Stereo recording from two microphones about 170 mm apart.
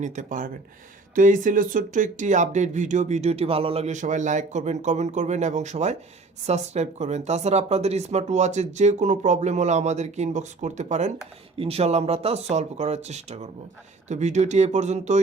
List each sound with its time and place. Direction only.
0.0 s speech: 50° right (ahead or behind)